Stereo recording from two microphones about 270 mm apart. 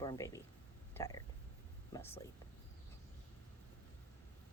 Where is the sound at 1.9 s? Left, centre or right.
Centre.